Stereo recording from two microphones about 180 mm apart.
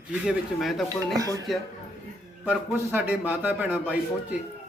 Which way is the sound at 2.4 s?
10° right (ahead or behind).